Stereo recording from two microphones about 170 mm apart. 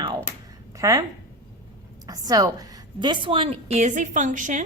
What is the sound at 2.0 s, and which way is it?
A woman's voice, 20° right (ahead or behind).